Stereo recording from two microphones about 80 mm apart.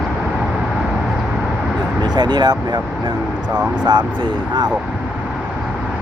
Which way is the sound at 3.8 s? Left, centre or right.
Right.